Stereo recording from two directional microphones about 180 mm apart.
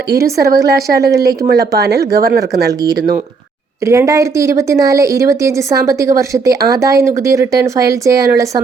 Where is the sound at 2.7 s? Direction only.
20° right (ahead or behind).